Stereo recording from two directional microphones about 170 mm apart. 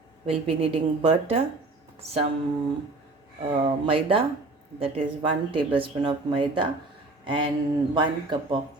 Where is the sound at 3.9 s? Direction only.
30° right (ahead or behind).